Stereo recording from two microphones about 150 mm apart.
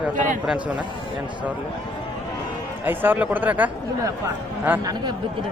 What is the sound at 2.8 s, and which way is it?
A man's voice, 15° right (ahead or behind).